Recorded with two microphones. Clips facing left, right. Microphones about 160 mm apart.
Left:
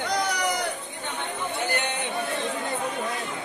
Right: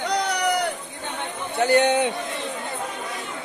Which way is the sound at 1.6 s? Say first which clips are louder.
Right 14 dB; 85° right.